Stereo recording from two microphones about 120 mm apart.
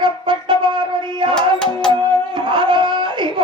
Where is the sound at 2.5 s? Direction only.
40° right (ahead or behind).